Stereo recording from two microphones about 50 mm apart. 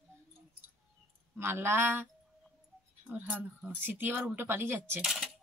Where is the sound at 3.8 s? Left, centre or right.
Right.